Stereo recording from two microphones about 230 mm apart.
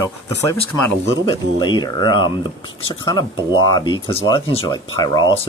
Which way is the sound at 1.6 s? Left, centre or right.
Centre.